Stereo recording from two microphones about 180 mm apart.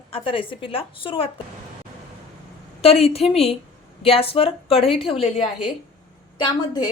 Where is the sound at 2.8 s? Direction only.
35° left (ahead or behind).